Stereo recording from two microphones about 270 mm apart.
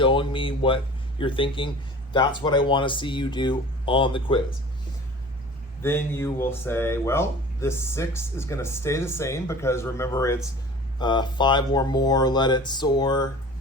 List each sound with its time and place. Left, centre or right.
0.0 s speech: centre
5.8 s speech: centre